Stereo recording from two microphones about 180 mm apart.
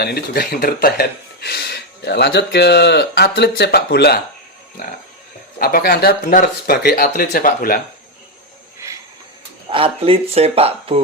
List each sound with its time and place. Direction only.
0.0 s speech: 60° left (ahead or behind)
5.5 s speech: 55° left (ahead or behind)
9.6 s speech: 30° right (ahead or behind)